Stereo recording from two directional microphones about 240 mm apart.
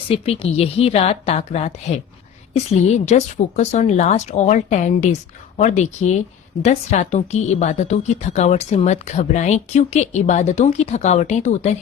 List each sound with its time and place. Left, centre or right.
0.1 s a woman's voice: left